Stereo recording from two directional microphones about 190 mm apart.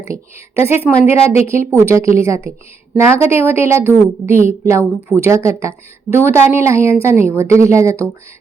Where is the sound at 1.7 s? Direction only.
15° right (ahead or behind).